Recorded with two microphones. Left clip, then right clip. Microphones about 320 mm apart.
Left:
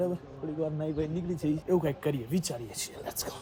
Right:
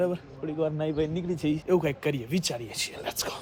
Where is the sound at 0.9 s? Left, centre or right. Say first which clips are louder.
Right 5 dB; centre.